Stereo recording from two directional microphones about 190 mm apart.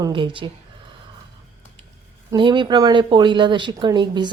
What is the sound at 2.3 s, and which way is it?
Speech, 25° right (ahead or behind).